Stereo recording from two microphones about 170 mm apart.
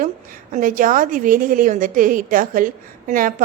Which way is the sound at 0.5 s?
50° right (ahead or behind).